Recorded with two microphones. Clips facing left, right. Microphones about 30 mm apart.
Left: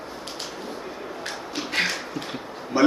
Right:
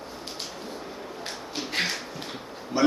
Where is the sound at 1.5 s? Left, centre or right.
Centre.